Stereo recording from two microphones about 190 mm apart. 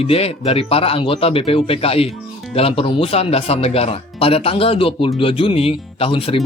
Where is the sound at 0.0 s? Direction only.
30° left (ahead or behind).